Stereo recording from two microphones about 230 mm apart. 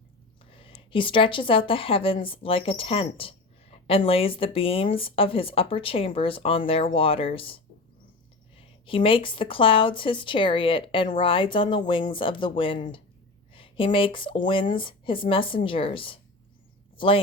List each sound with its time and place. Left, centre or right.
0.5 s speech: left